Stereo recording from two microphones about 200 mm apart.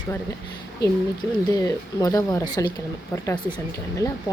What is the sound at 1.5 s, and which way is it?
Speech, 15° left (ahead or behind).